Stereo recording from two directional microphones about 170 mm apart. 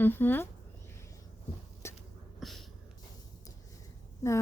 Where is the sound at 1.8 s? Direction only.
15° left (ahead or behind).